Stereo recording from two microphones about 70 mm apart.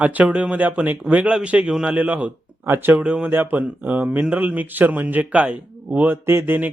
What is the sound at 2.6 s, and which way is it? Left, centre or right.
Speech, right.